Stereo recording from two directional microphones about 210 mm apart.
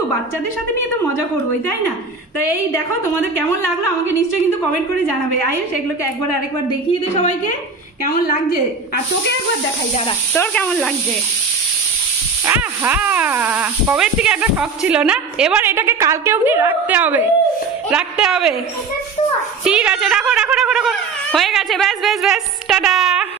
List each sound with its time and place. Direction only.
6.9 s a woman's voice: 35° left (ahead or behind)
10.3 s speech: 10° left (ahead or behind)
12.4 s speech: 10° right (ahead or behind)
19.6 s speech: 5° right (ahead or behind)